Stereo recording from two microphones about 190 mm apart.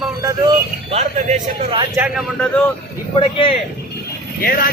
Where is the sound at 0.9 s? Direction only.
30° right (ahead or behind).